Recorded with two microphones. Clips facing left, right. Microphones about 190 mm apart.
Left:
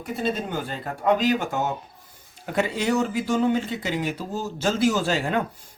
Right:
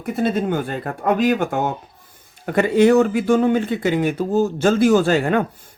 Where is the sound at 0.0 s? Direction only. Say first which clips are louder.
Right 7 dB; 55° right (ahead or behind).